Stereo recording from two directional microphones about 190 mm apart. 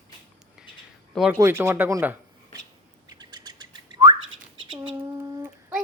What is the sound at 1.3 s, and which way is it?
Speech, 15° right (ahead or behind).